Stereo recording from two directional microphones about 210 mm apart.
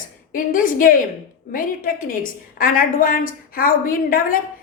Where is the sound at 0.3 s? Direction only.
40° left (ahead or behind).